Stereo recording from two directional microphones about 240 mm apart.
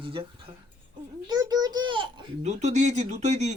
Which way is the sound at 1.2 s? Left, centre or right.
Centre.